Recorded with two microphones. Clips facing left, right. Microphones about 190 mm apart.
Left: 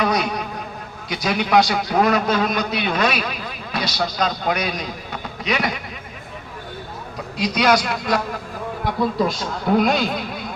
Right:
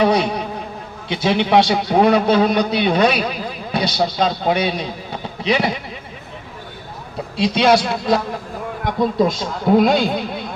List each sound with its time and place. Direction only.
0.0 s insect: 30° right (ahead or behind)
1.0 s a man's voice: 25° right (ahead or behind)
7.3 s a man's voice: 30° right (ahead or behind)